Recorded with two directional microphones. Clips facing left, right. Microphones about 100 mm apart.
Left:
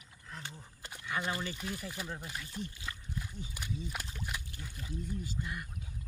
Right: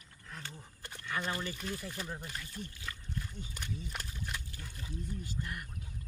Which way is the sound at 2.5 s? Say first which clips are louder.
Left 3 dB; 20° left (ahead or behind).